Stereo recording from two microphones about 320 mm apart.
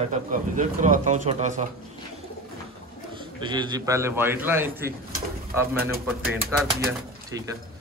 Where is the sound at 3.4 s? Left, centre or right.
Centre.